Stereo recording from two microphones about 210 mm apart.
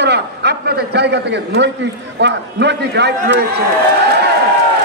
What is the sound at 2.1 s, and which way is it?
A man's voice, 55° right (ahead or behind).